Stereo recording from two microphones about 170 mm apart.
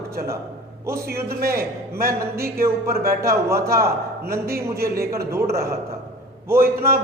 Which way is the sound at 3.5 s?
15° right (ahead or behind).